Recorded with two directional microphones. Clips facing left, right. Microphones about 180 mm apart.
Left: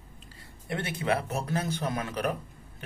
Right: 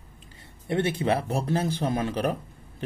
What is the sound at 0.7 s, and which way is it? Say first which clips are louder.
Speech: right 5 dB; 25° right (ahead or behind).